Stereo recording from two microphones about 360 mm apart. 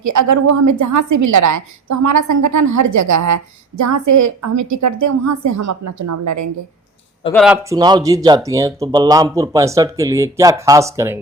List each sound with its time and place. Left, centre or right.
0.0 s a woman's voice: right
7.3 s speech: centre